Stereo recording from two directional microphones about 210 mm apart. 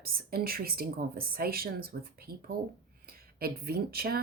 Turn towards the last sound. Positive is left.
turn(degrees=-45)  # may be behind; listen again after turning